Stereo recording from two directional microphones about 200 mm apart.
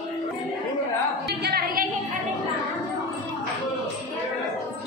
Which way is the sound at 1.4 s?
50° right (ahead or behind).